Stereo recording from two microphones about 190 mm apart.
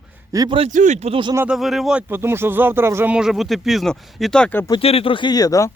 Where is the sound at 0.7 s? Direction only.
40° right (ahead or behind).